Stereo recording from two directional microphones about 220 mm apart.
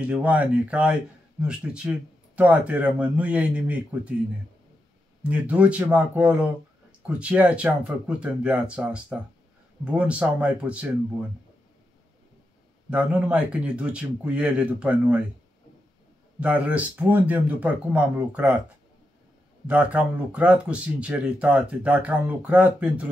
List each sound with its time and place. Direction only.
0.0 s speech: 5° right (ahead or behind)
5.3 s speech: 5° right (ahead or behind)
12.9 s speech: 5° right (ahead or behind)
16.3 s speech: 5° right (ahead or behind)
19.7 s speech: 5° right (ahead or behind)